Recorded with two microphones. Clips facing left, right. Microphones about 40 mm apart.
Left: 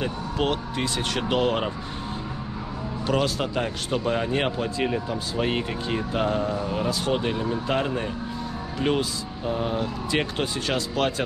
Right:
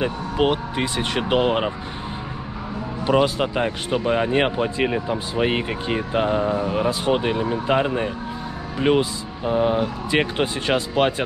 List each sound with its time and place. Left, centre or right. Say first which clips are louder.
0.0 s speech: right 5 dB; centre
3.1 s speech: right 6 dB; right